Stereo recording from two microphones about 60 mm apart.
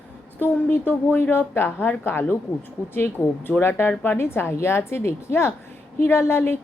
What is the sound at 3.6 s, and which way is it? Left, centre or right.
A woman's voice, left.